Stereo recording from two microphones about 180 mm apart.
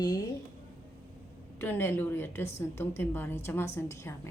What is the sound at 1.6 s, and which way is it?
A woman's voice, 10° left (ahead or behind).